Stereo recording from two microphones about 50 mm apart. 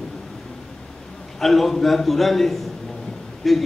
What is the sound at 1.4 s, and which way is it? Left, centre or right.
A man's voice, centre.